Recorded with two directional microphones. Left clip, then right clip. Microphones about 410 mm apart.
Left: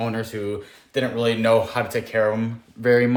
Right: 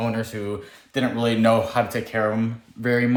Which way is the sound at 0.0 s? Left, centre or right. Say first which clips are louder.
Even; centre.